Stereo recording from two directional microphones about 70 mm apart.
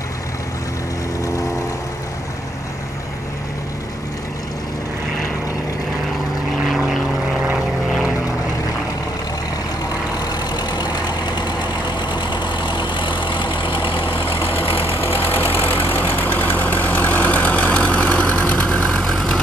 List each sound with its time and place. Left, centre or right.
6.6 s vehicle: centre
10.1 s vehicle: left
15.0 s engine: left; by 19.0 s centre
19.0 s vehicle: centre